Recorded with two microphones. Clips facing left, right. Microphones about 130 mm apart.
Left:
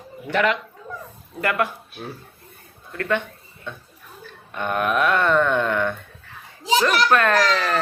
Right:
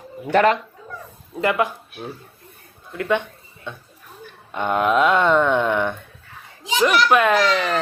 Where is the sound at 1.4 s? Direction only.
15° right (ahead or behind).